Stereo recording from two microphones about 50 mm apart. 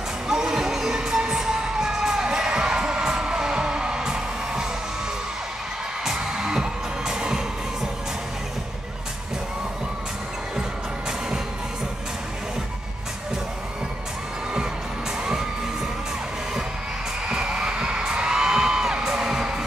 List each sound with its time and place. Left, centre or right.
0.3 s cheering: centre
6.0 s music: centre
11.1 s music: centre
17.3 s music: centre